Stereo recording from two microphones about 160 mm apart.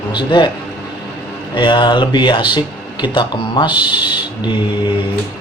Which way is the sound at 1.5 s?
30° left (ahead or behind).